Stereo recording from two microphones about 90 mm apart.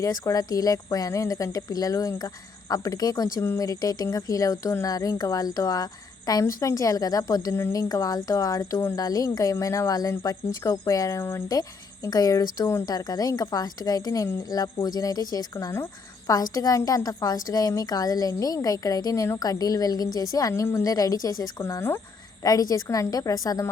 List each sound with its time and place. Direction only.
0.0 s speech: 40° left (ahead or behind)
12.0 s a woman's voice: 40° left (ahead or behind)
22.4 s speech: 45° left (ahead or behind)